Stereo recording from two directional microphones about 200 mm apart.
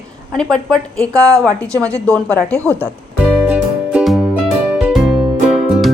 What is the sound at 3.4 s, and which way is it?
Music, 5° right (ahead or behind).